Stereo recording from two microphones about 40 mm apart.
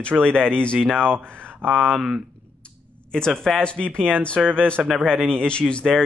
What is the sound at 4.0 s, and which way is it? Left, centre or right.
Speech, right.